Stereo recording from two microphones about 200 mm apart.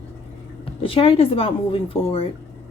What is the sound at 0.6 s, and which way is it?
Speech, 30° left (ahead or behind).